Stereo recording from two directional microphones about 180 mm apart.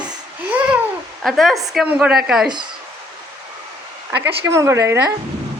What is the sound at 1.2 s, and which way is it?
A woman's voice, centre (ahead or behind).